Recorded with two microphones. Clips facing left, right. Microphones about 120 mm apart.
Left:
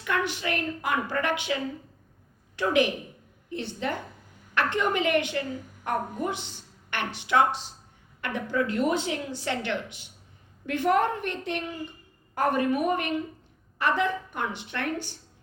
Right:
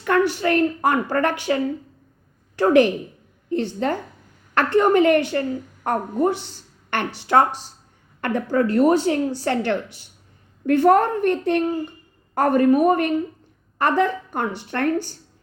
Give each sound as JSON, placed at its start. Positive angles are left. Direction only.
{"t": 0.0, "sound": "a woman's voice", "side_deg": -45}